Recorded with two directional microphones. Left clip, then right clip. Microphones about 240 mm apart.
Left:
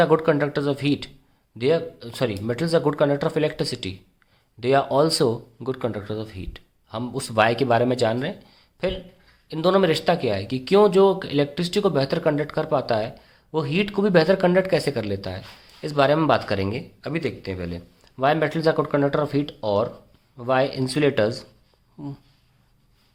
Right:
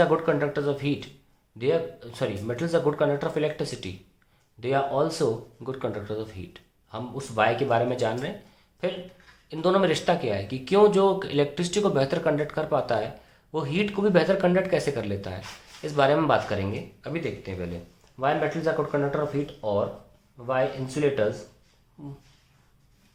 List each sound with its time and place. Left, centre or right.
0.0 s speech: left